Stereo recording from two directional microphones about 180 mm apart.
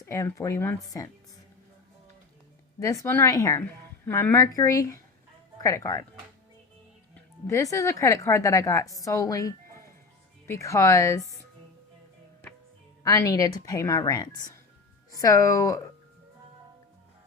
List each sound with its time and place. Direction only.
0.0 s speech: 15° left (ahead or behind)
2.8 s a woman's voice: 15° left (ahead or behind)
7.1 s speech: 15° left (ahead or behind)
13.1 s a woman's voice: 20° left (ahead or behind)